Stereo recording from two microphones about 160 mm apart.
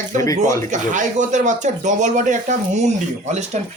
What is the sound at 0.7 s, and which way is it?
Speech, 50° right (ahead or behind).